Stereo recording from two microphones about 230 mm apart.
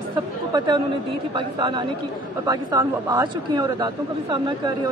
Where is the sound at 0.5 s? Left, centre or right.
Centre.